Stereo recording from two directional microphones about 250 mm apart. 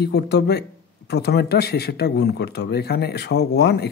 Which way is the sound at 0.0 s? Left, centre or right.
Left.